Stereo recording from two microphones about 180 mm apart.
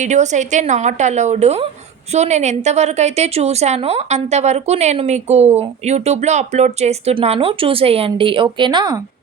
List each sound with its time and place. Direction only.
0.0 s a woman's voice: 40° right (ahead or behind); by 9.0 s 25° right (ahead or behind)